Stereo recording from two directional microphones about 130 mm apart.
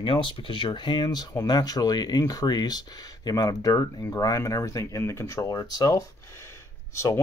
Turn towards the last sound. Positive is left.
turn(degrees=20)  # may be behind; listen again after turning